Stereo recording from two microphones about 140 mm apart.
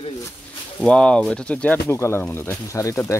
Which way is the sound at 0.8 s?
5° left (ahead or behind).